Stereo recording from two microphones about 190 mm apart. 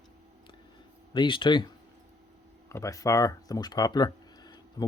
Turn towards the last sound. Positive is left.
turn(degrees=20)  # may be behind; listen again after turning